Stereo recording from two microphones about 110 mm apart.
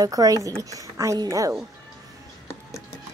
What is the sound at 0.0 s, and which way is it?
A woman's voice, 30° right (ahead or behind).